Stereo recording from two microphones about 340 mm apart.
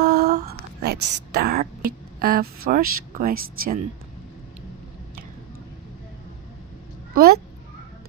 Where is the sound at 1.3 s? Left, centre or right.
Right.